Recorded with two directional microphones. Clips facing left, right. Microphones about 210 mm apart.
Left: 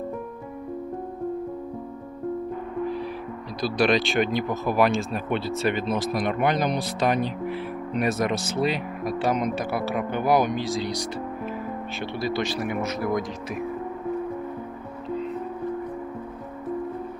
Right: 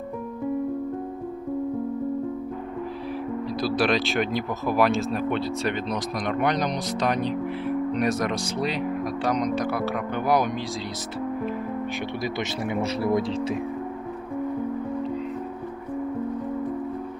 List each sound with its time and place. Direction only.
3.6 s speech: centre (ahead or behind)
12.2 s speech: 20° right (ahead or behind)